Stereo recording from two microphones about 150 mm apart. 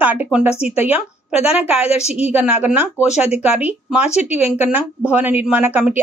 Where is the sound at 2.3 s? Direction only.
10° right (ahead or behind).